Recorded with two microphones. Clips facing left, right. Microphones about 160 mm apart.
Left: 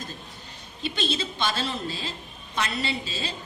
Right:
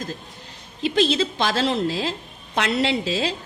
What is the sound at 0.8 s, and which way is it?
A woman's voice, 90° right.